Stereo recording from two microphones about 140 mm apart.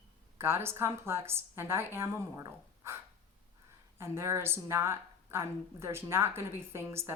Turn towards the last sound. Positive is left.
turn(degrees=-20)  # may be behind; listen again after turning